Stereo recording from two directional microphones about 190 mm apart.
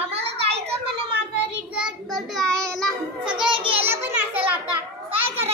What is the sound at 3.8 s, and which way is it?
Children playing, 10° right (ahead or behind).